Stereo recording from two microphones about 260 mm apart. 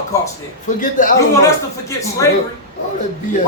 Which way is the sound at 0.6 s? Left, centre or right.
Left.